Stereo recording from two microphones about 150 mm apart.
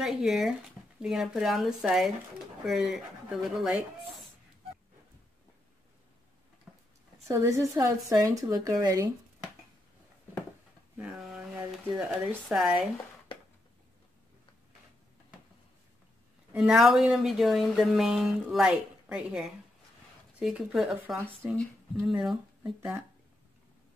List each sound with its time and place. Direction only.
0.0 s speech: centre (ahead or behind)
7.2 s speech: 20° right (ahead or behind)
11.0 s speech: 5° right (ahead or behind)
16.5 s speech: centre (ahead or behind)
22.6 s speech: 15° right (ahead or behind)